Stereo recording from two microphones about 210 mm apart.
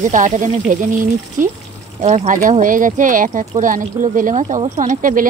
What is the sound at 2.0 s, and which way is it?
Speech, 35° right (ahead or behind).